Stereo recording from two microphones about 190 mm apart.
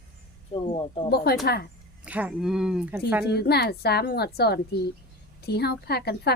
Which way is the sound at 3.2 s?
55° left (ahead or behind).